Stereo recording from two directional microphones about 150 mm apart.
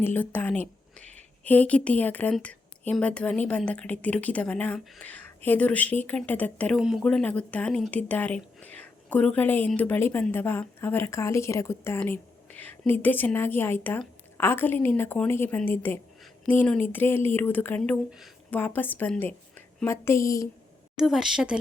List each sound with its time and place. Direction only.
0.0 s speech: 15° left (ahead or behind)
6.7 s speech: 5° right (ahead or behind); by 20.5 s 20° left (ahead or behind)
21.0 s speech: centre (ahead or behind)